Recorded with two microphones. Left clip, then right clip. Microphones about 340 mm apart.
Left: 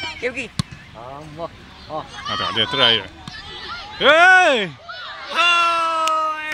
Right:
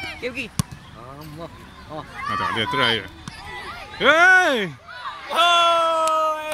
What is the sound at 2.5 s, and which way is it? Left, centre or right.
Speech, centre.